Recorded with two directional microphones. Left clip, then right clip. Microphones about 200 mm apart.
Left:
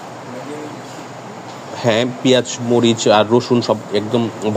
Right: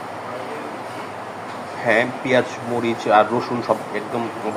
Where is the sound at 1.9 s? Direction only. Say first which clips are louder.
Left 3 dB; 65° left (ahead or behind).